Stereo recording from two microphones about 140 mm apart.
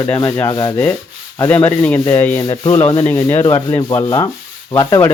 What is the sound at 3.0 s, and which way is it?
Speech, 15° left (ahead or behind).